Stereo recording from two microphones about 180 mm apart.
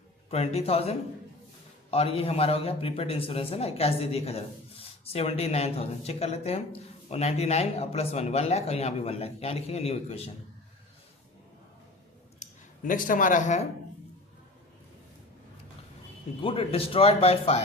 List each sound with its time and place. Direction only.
0.3 s a man's voice: 35° left (ahead or behind)
12.4 s speech: 50° left (ahead or behind)
16.4 s a man's voice: 30° left (ahead or behind)